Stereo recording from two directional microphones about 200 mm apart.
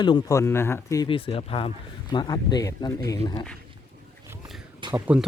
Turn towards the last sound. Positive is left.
turn(degrees=-20)  # may be behind; listen again after turning